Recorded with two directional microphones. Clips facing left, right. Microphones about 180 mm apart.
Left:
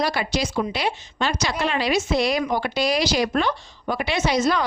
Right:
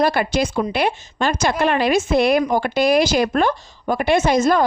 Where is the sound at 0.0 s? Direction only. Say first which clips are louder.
Right 6 dB; 50° right (ahead or behind).